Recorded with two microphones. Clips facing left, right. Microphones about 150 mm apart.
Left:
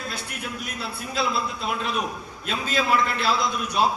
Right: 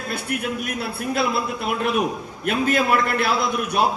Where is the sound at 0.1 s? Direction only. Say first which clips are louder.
Right 8 dB; 55° right (ahead or behind).